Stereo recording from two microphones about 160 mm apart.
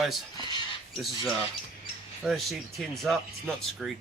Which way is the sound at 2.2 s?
Centre (ahead or behind).